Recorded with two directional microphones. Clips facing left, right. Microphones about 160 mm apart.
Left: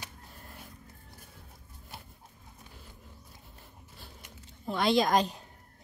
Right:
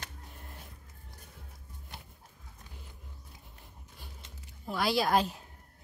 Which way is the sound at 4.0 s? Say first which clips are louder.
Left 1 dB; 15° right (ahead or behind).